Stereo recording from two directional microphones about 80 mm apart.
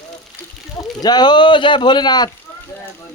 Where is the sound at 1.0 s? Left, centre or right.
Left.